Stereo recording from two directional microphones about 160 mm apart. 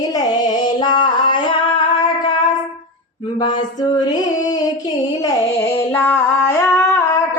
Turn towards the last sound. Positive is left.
turn(degrees=15)  # may be behind; listen again after turning